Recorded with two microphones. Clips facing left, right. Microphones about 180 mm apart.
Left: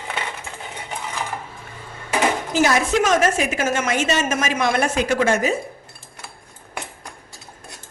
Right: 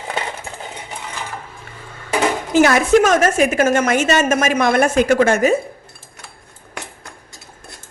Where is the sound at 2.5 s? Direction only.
60° right (ahead or behind).